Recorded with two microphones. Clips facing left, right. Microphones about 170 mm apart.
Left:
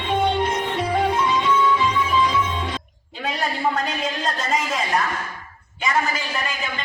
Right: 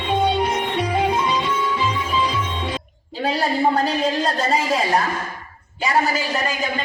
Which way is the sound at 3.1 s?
30° right (ahead or behind).